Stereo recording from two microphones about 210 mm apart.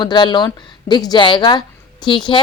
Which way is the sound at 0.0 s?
20° left (ahead or behind).